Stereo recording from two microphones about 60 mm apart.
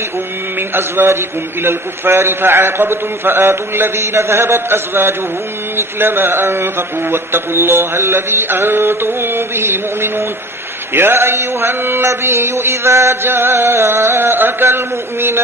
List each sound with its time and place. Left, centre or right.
0.7 s speech: right